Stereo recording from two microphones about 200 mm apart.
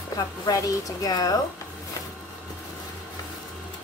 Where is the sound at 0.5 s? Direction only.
15° left (ahead or behind).